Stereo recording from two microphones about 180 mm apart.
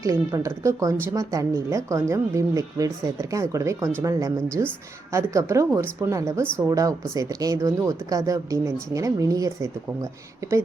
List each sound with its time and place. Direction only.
0.0 s a woman's voice: 20° right (ahead or behind)